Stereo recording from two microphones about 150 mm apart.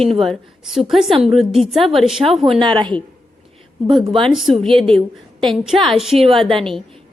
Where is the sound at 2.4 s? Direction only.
35° right (ahead or behind).